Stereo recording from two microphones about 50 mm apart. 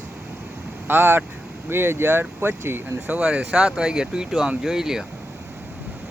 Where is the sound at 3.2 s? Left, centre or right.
Centre.